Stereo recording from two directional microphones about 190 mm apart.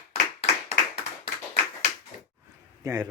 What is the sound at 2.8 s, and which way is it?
Speech, 15° right (ahead or behind).